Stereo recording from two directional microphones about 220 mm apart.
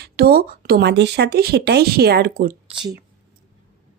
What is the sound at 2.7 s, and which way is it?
Speech, 20° right (ahead or behind).